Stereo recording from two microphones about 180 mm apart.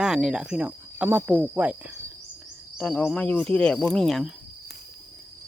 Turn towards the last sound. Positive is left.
turn(degrees=0)  # may be behind; listen again after turning